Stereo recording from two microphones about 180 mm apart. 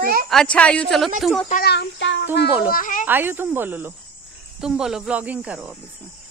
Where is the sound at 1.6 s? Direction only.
75° left (ahead or behind).